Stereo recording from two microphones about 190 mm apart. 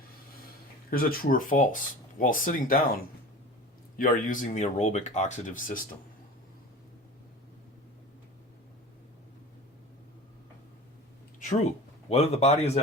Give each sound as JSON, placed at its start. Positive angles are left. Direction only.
{"t": 0.9, "sound": "speech", "side_deg": 50}
{"t": 3.9, "sound": "speech", "side_deg": 45}
{"t": 12.0, "sound": "speech", "side_deg": 35}